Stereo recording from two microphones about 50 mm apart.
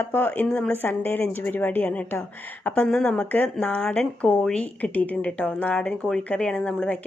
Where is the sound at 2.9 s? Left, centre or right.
Centre.